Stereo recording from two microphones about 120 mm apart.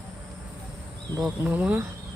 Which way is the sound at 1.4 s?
15° right (ahead or behind).